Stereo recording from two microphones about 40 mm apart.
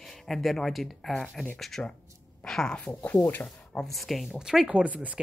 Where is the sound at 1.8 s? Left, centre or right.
Left.